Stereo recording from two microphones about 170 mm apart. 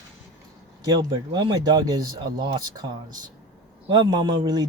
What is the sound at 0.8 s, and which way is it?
Speech, 25° right (ahead or behind).